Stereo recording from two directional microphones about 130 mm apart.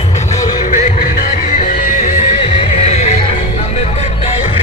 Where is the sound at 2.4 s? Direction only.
45° left (ahead or behind).